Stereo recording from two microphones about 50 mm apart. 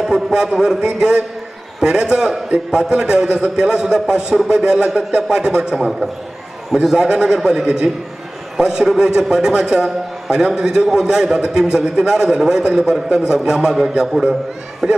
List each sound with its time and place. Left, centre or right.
0.0 s a man's voice: centre
5.8 s a man's voice: centre